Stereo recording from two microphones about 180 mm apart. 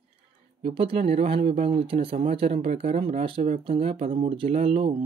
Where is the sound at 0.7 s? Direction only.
30° right (ahead or behind).